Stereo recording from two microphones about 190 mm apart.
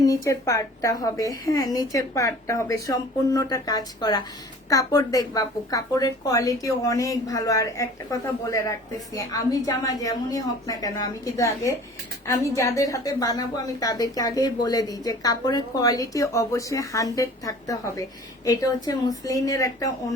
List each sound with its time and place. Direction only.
0.0 s a woman's voice: 15° left (ahead or behind)